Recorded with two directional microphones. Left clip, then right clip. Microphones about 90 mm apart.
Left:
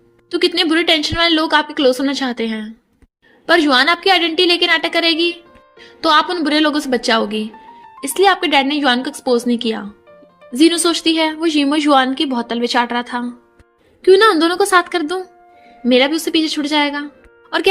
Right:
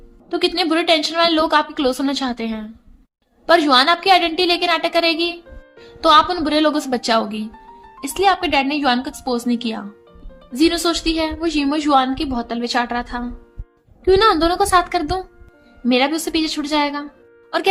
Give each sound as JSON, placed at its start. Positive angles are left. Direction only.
{"t": 0.3, "sound": "a woman's voice", "side_deg": 30}
{"t": 14.0, "sound": "a woman's voice", "side_deg": 40}